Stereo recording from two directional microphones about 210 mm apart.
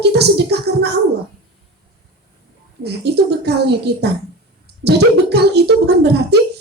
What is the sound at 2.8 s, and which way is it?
Speech, 50° right (ahead or behind).